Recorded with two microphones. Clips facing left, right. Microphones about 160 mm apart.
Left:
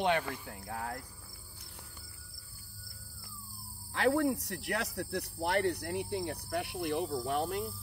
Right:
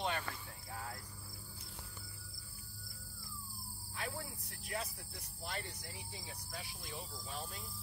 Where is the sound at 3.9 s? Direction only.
80° left.